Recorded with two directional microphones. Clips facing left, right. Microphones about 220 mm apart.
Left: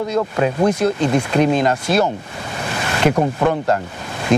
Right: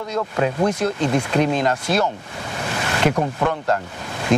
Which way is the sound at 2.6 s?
10° left (ahead or behind).